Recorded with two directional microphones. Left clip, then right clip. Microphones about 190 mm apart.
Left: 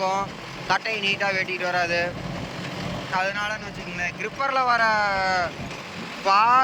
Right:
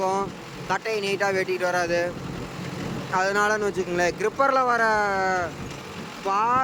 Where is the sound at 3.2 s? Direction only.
25° right (ahead or behind).